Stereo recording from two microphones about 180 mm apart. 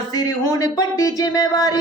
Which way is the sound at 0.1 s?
20° left (ahead or behind).